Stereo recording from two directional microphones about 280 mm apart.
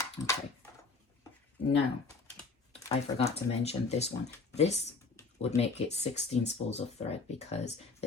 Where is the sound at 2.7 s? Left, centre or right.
Left.